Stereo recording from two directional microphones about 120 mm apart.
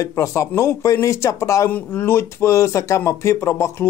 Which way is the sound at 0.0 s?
25° left (ahead or behind).